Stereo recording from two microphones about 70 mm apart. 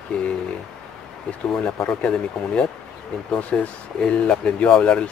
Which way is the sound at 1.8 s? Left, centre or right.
Centre.